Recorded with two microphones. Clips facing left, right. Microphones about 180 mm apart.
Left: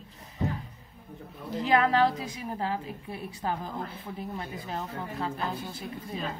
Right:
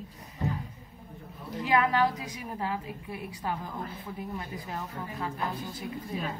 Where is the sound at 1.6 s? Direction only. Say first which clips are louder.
Left 2 dB; 30° left (ahead or behind).